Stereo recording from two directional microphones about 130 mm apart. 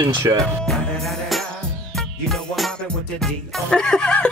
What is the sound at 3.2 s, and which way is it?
Speech, 5° left (ahead or behind).